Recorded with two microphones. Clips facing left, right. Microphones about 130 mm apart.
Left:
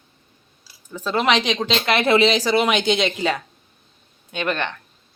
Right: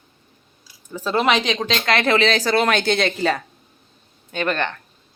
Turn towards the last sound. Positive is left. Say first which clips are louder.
# right 2 dB
turn(degrees=5)  # may be behind; listen again after turning